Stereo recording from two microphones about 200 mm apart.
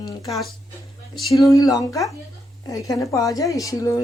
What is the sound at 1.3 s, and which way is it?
A woman's voice, 15° left (ahead or behind).